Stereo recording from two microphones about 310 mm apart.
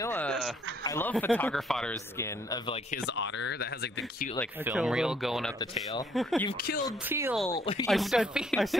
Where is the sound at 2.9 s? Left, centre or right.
Left.